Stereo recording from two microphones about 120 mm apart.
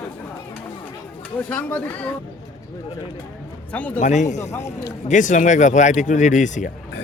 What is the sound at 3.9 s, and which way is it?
Speech, 80° left.